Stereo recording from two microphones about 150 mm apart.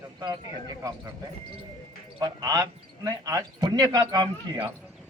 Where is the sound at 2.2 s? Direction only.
25° right (ahead or behind).